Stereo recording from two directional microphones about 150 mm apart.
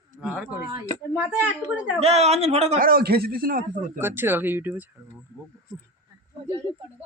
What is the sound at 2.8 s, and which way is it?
Speech, 80° right.